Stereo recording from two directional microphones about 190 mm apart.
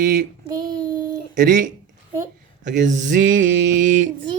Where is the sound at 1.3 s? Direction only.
45° right (ahead or behind).